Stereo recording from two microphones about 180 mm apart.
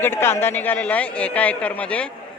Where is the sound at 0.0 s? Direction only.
10° left (ahead or behind).